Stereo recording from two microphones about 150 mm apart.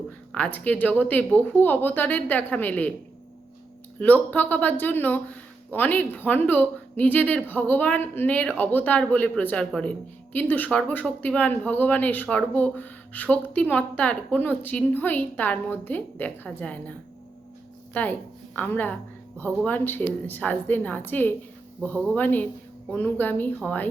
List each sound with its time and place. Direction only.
0.3 s speech: 10° left (ahead or behind)
4.0 s speech: 10° left (ahead or behind)
17.9 s a woman's voice: 10° left (ahead or behind)